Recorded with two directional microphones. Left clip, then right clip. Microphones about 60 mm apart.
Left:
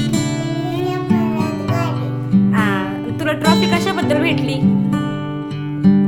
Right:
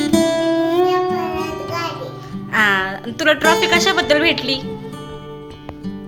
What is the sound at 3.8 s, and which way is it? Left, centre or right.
Speech, left.